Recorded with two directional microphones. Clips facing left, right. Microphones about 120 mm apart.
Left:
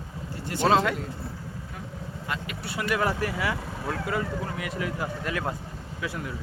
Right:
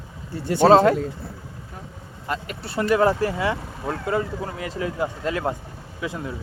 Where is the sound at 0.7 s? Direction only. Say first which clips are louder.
Right 8 dB; 35° right (ahead or behind).